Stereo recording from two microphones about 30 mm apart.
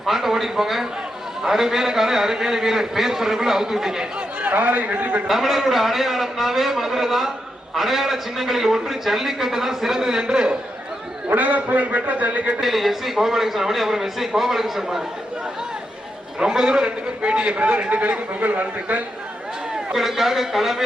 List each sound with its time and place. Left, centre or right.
0.0 s a man's voice: centre
4.4 s a man's voice: right
5.3 s a man's voice: centre; by 10.6 s right
11.3 s a man's voice: right
12.5 s a man's voice: centre
16.4 s a man's voice: right
16.8 s a man's voice: right
17.5 s a man's voice: right
18.3 s a man's voice: right
19.9 s a man's voice: centre